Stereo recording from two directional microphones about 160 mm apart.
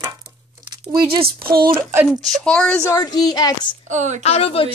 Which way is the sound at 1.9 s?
5° right (ahead or behind).